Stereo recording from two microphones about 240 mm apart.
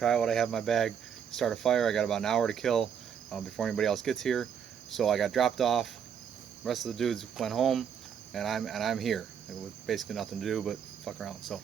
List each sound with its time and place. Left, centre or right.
0.0 s cricket: centre